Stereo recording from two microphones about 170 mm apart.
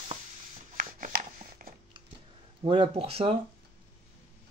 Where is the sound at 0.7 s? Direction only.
55° right (ahead or behind).